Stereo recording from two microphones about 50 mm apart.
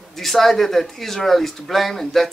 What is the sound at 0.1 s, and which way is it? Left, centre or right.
Speech, centre.